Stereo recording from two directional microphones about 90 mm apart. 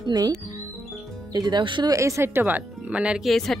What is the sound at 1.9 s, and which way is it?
A woman's voice, 35° right (ahead or behind).